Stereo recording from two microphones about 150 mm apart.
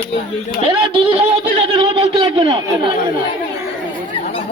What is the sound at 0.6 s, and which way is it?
Speech, 35° right (ahead or behind).